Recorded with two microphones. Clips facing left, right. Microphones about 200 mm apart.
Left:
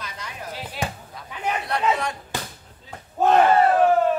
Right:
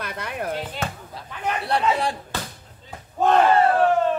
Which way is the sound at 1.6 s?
30° right (ahead or behind).